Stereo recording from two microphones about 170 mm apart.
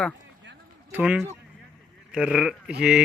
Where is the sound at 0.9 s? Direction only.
5° right (ahead or behind).